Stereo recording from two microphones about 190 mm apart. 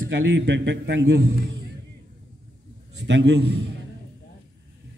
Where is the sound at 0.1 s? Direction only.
75° right (ahead or behind).